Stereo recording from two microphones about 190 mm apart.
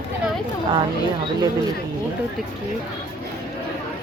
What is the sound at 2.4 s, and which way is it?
Speech, centre (ahead or behind).